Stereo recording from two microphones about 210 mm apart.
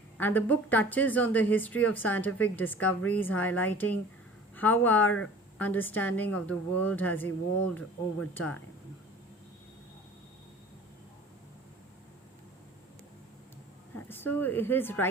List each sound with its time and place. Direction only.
0.2 s speech: 10° left (ahead or behind)
14.1 s speech: 10° left (ahead or behind)